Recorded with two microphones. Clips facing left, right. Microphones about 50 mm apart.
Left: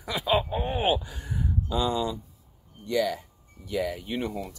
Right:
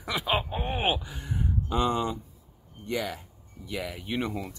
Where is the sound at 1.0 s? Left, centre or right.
Right.